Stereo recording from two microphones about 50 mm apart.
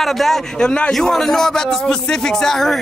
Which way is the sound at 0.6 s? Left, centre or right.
Centre.